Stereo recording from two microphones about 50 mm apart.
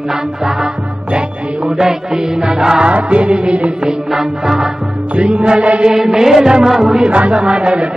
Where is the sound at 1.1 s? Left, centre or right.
Centre.